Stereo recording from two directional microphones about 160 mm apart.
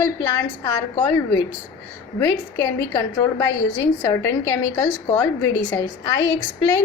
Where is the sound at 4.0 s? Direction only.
15° left (ahead or behind).